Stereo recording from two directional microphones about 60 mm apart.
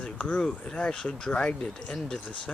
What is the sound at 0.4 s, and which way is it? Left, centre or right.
Speech, centre.